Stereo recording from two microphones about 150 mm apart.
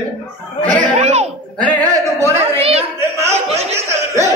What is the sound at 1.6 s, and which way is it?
Singing, 10° left (ahead or behind).